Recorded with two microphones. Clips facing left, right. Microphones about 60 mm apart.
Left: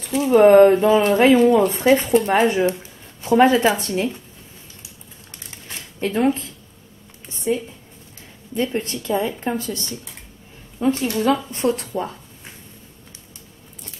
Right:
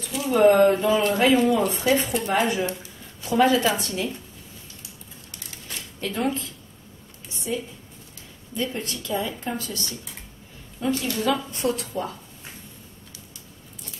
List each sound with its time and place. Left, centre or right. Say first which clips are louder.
0.1 s speech: left 6 dB; left
5.9 s speech: left 7 dB; left
7.5 s speech: left 7 dB; left